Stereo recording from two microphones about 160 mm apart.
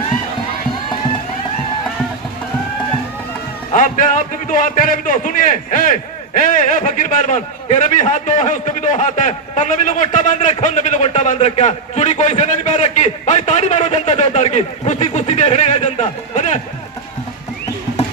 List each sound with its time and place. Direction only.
3.7 s a man's voice: 55° left (ahead or behind)